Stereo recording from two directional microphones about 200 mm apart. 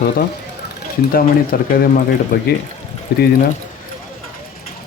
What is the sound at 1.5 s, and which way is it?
Speech, 50° left (ahead or behind).